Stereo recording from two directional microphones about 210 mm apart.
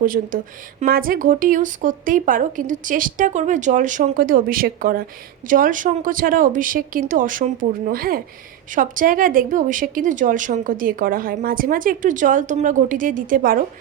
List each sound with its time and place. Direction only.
0.0 s speech: 40° right (ahead or behind)